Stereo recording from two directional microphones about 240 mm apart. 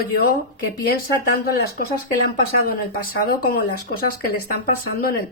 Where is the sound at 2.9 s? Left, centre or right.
Left.